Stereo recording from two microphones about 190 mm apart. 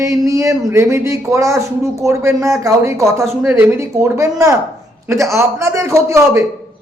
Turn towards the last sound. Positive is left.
turn(degrees=-15)  # may be behind; listen again after turning